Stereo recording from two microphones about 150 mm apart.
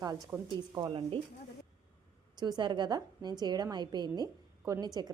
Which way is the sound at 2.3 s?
30° right (ahead or behind).